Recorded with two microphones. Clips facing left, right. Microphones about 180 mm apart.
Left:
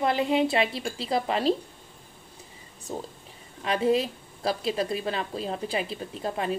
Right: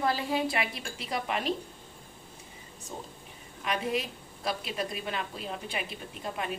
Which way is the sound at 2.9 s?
40° left (ahead or behind).